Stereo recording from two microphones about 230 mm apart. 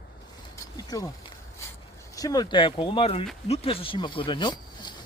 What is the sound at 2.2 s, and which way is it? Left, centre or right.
Speech, centre.